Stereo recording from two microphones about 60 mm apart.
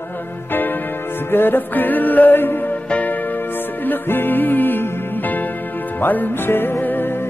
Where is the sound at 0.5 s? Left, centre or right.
Left.